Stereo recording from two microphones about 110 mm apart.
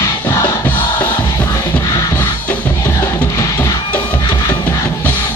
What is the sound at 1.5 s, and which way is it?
Music, 30° left (ahead or behind).